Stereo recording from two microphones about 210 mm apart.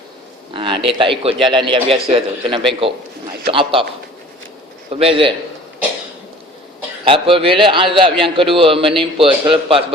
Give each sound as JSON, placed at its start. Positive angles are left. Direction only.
{"t": 0.5, "sound": "a man's voice", "side_deg": -25}
{"t": 4.9, "sound": "a man's voice", "side_deg": -25}
{"t": 7.1, "sound": "a man's voice", "side_deg": -25}